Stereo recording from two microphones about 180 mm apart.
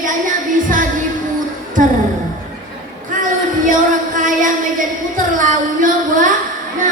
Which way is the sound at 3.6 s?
45° right (ahead or behind).